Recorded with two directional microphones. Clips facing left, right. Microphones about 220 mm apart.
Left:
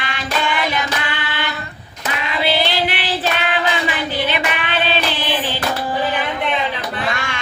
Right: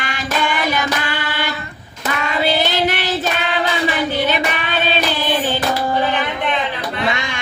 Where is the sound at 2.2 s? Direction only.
45° right (ahead or behind).